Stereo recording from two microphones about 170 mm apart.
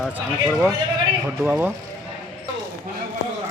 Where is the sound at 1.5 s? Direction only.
10° right (ahead or behind).